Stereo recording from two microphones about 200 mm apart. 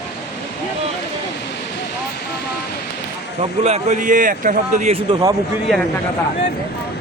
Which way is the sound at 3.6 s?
35° right (ahead or behind).